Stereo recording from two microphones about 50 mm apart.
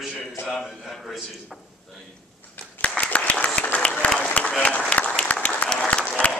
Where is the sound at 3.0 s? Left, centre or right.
Left.